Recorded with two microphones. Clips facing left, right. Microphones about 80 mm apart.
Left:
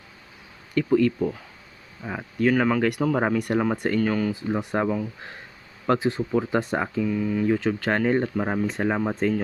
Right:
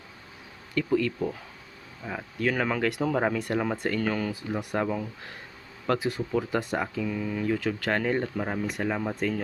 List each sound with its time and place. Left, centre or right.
0.7 s speech: centre
3.2 s speech: centre
4.0 s speech: centre
4.3 s speech: left
7.0 s speech: centre
7.4 s speech: left